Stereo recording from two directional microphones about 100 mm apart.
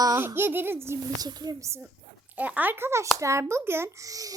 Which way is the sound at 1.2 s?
40° right (ahead or behind).